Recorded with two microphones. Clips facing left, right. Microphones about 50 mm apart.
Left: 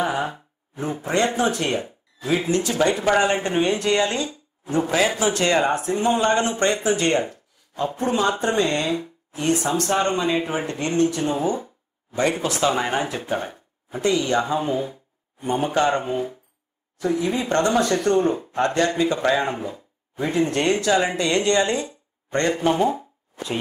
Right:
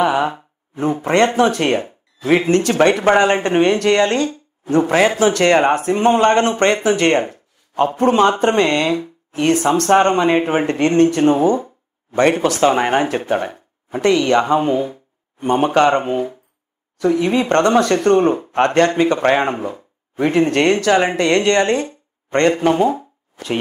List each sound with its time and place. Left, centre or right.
0.0 s speech: right
3.1 s speech: right
12.6 s speech: right
17.0 s speech: right